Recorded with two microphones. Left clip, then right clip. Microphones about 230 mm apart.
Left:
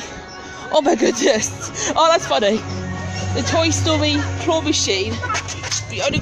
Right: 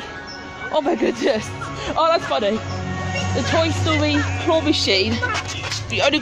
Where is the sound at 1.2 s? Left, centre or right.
Left.